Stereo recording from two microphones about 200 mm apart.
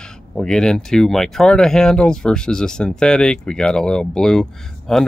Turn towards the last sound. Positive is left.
turn(degrees=5)  # may be behind; listen again after turning